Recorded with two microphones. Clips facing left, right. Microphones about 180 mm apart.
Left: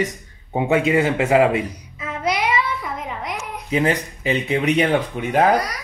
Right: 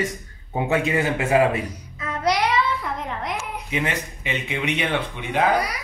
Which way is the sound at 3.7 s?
35° left (ahead or behind).